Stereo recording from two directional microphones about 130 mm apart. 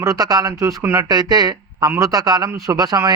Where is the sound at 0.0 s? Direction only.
25° right (ahead or behind).